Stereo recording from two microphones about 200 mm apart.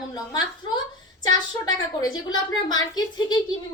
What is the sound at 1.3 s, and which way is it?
A woman's voice, 20° left (ahead or behind).